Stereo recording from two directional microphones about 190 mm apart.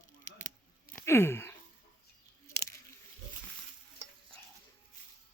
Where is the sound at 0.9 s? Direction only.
10° left (ahead or behind).